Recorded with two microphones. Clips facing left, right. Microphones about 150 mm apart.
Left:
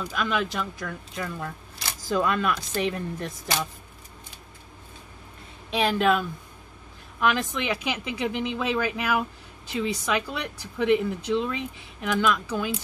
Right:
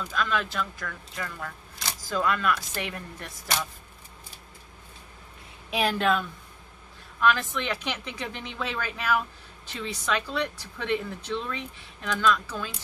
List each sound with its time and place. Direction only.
0.0 s speech: 15° left (ahead or behind)
5.7 s a woman's voice: centre (ahead or behind)
7.2 s speech: 15° left (ahead or behind)